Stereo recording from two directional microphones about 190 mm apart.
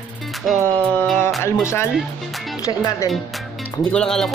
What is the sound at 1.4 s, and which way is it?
Speech, 15° left (ahead or behind).